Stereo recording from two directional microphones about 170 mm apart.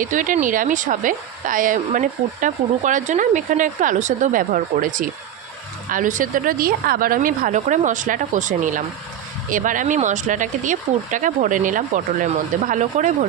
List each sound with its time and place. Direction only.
0.0 s speech: 50° right (ahead or behind)